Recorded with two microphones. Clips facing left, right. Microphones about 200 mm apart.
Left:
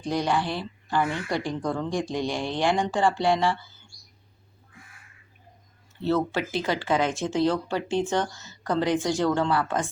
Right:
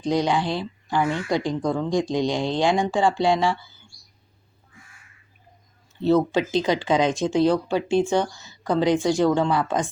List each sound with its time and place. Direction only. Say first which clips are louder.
0.1 s speech: right 4 dB; 15° right (ahead or behind)
6.0 s speech: right 5 dB; 15° right (ahead or behind)